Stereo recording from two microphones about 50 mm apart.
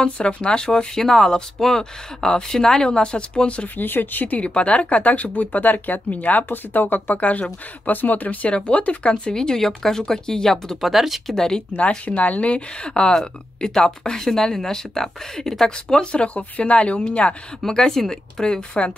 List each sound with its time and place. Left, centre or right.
0.0 s speech: left
3.6 s speech: left
4.4 s speech: left
10.8 s speech: centre
11.3 s speech: centre
11.9 s speech: left
17.6 s speech: centre